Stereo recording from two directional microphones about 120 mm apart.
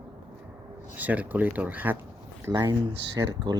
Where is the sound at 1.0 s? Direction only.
15° right (ahead or behind).